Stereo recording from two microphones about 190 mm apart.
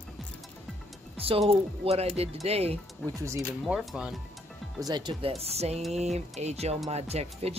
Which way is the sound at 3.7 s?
5° right (ahead or behind).